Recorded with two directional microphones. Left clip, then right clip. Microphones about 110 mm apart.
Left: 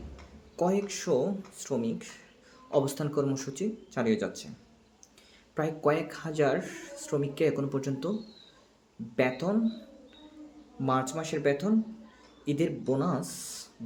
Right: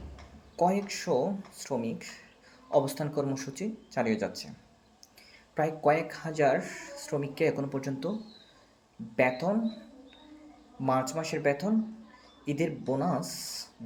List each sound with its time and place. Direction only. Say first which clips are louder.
0.5 s speech: right 1 dB; 15° left (ahead or behind)
5.5 s speech: right 2 dB; 15° left (ahead or behind)
9.1 s speech: right 2 dB; 15° left (ahead or behind)
10.8 s speech: right 1 dB; 15° left (ahead or behind)